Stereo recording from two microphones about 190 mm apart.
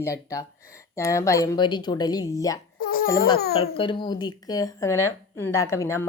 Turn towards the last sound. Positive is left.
turn(degrees=15)  # may be behind; listen again after turning